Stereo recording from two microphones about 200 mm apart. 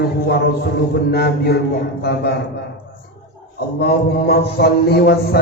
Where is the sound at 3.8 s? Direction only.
50° left (ahead or behind).